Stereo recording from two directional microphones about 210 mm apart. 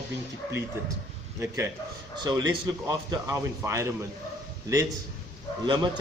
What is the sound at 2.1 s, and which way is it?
Speech, 20° right (ahead or behind).